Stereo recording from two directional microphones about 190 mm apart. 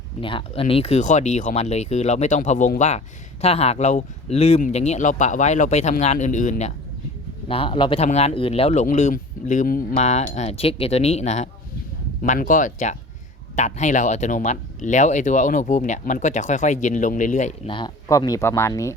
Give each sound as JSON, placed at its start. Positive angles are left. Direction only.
{"t": 0.2, "sound": "speech", "side_deg": 25}
{"t": 17.7, "sound": "speech", "side_deg": 25}